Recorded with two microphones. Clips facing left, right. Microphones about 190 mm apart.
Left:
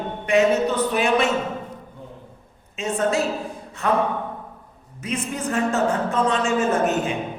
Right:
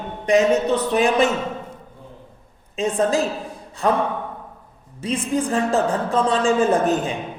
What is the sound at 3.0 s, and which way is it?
Mantra, 35° right (ahead or behind).